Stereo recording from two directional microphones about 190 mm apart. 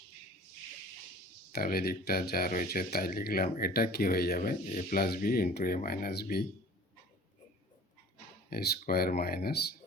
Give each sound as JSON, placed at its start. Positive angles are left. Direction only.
{"t": 1.5, "sound": "speech", "side_deg": 55}
{"t": 8.4, "sound": "speech", "side_deg": 55}